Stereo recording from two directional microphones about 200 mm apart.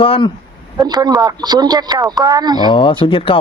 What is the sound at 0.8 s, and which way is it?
Speech, 20° right (ahead or behind).